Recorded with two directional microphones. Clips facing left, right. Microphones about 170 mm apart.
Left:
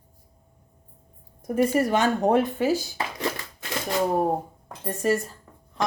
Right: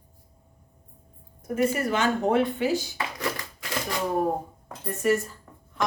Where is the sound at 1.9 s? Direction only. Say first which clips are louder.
Left 2 dB; 40° left (ahead or behind).